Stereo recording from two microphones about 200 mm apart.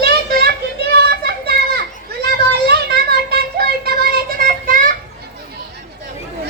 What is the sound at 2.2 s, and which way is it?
Child singing, 55° right (ahead or behind).